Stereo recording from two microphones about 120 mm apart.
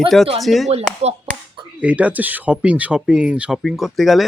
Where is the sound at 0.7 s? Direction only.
65° right (ahead or behind).